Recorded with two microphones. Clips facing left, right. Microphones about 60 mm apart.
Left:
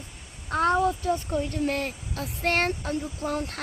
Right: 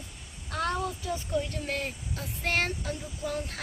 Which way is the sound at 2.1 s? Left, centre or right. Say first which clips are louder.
Left 4 dB; left.